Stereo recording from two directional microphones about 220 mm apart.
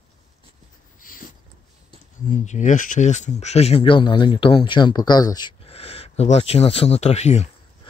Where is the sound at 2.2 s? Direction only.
35° left (ahead or behind).